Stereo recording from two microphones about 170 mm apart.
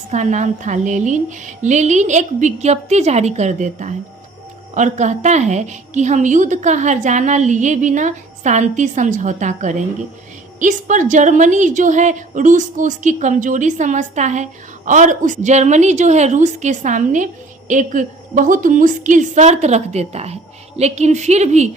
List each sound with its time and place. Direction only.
0.1 s a woman's voice: 45° right (ahead or behind)